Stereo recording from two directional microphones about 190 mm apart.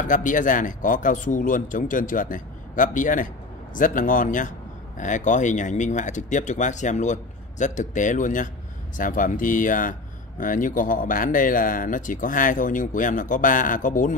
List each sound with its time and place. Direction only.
0.0 s speech: 45° left (ahead or behind)